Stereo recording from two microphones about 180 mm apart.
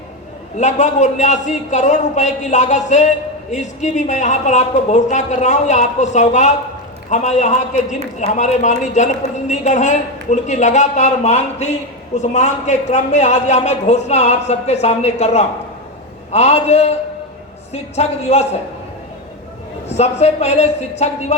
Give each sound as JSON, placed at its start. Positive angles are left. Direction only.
{"t": 0.6, "sound": "a man's voice", "side_deg": 40}
{"t": 19.9, "sound": "a man's voice", "side_deg": 35}